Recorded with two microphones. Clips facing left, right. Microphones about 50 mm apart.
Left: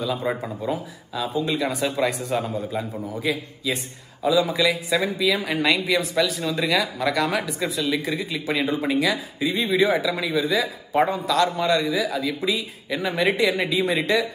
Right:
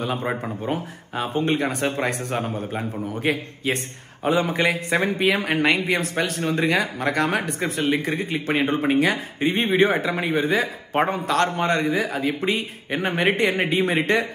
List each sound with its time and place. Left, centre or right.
0.0 s speech: right